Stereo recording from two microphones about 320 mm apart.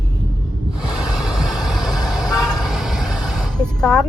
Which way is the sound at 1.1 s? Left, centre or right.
Centre.